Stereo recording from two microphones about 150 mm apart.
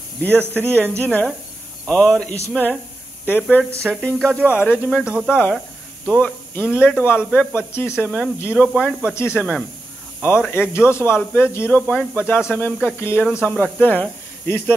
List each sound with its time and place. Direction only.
0.2 s speech: 10° left (ahead or behind)
3.9 s speech: 5° left (ahead or behind)
4.3 s speech: 10° right (ahead or behind)
4.6 s speech: 10° left (ahead or behind)
5.0 s speech: 5° right (ahead or behind)
5.3 s speech: 10° left (ahead or behind)
7.2 s speech: centre (ahead or behind)
7.5 s speech: 15° left (ahead or behind)
9.0 s speech: 15° left (ahead or behind)
9.4 s speech: 5° left (ahead or behind)
10.5 s speech: 15° left (ahead or behind)